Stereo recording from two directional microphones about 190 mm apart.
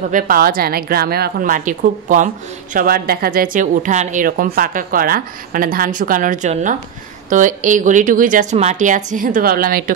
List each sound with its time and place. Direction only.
0.1 s a woman's voice: 50° right (ahead or behind)
3.5 s a woman's voice: 40° right (ahead or behind)